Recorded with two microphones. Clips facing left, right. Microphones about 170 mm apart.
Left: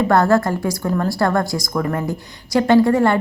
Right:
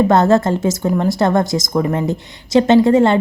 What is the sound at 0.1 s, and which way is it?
A woman's voice, 20° right (ahead or behind).